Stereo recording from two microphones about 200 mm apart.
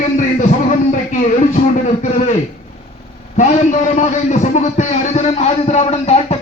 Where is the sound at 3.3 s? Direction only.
35° left (ahead or behind).